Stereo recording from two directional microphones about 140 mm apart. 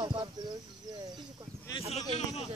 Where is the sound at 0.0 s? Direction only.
30° right (ahead or behind).